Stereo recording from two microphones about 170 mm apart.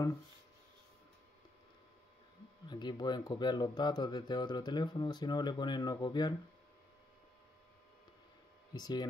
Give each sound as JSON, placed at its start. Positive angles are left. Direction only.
{"t": 2.7, "sound": "speech", "side_deg": 25}
{"t": 8.7, "sound": "speech", "side_deg": 25}